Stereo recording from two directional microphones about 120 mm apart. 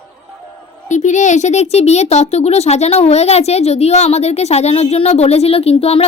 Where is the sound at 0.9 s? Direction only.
80° left.